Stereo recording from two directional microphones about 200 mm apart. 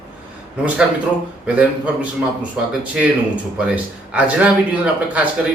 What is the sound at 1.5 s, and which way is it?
Speech, 5° right (ahead or behind).